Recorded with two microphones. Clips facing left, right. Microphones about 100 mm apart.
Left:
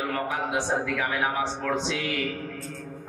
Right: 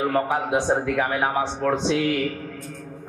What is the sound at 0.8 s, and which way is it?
A man's voice, 40° right (ahead or behind).